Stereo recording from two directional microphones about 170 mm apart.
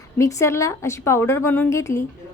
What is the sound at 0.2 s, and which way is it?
A woman's voice, 15° left (ahead or behind).